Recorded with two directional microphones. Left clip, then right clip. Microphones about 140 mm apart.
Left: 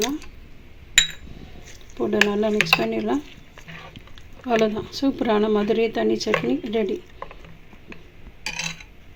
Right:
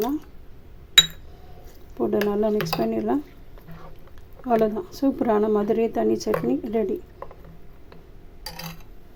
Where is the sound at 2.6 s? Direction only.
15° right (ahead or behind).